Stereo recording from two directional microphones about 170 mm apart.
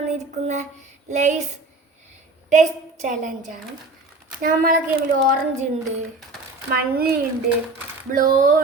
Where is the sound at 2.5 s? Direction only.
45° right (ahead or behind).